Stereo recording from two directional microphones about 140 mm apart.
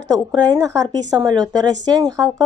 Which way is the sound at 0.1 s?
30° right (ahead or behind).